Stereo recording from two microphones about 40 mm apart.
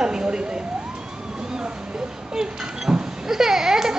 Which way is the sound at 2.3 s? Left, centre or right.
Centre.